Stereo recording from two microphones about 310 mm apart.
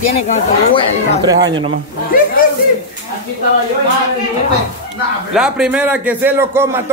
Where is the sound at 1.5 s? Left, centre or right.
Centre.